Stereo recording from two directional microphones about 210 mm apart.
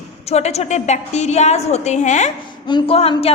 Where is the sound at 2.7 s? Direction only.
25° left (ahead or behind).